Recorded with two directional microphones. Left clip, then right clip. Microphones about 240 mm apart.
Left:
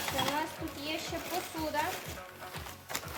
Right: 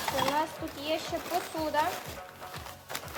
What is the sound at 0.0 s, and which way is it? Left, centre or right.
Stir, centre.